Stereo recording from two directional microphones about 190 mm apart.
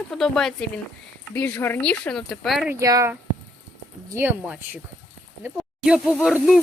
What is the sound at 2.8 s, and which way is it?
Speech, 15° right (ahead or behind).